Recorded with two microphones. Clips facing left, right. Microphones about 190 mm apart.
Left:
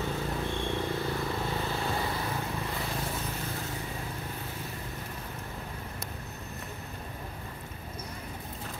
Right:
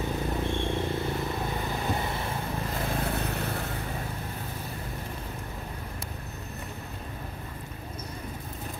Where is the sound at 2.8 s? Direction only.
60° right (ahead or behind).